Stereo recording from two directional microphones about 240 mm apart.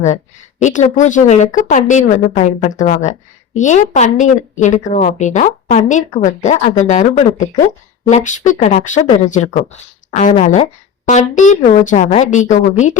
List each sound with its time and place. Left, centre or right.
0.6 s a woman's voice: left